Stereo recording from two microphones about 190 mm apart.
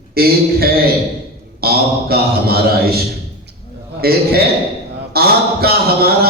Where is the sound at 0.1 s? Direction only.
55° right (ahead or behind).